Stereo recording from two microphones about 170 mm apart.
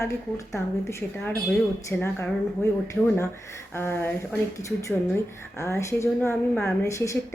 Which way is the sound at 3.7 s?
10° left (ahead or behind).